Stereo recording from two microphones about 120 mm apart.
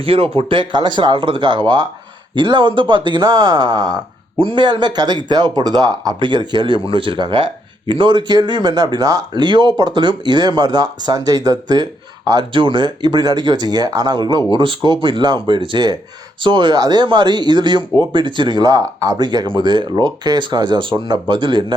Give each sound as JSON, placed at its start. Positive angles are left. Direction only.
{"t": 0.0, "sound": "speech", "side_deg": -50}